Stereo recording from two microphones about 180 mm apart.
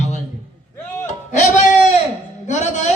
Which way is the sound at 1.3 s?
40° left (ahead or behind).